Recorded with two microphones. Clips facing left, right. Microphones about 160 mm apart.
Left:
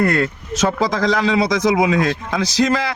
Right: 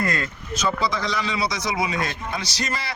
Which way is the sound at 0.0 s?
65° left (ahead or behind).